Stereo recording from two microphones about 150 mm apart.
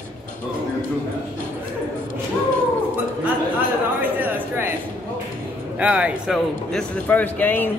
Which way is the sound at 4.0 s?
10° right (ahead or behind).